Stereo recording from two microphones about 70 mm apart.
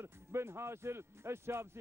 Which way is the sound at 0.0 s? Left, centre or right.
Right.